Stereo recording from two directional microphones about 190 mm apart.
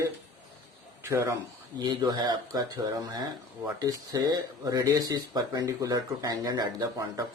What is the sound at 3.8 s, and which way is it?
Speech, 20° right (ahead or behind).